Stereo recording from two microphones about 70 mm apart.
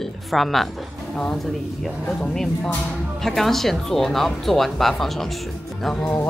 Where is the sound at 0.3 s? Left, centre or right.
Centre.